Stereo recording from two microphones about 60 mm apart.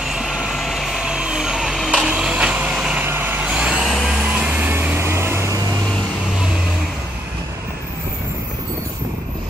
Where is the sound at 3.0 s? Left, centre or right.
Right.